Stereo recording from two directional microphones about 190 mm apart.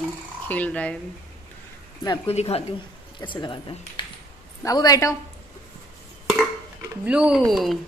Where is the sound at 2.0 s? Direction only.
25° left (ahead or behind).